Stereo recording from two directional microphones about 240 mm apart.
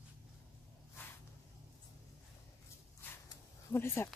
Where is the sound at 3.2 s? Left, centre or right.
Centre.